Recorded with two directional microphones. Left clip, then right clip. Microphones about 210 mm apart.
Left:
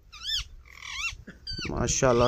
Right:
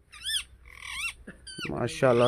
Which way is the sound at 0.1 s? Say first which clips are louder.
Left 1 dB; 55° right (ahead or behind).